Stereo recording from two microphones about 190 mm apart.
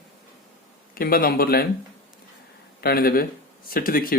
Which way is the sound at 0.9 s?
50° left (ahead or behind).